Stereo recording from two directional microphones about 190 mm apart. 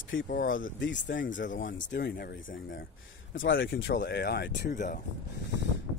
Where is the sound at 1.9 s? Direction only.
55° left (ahead or behind).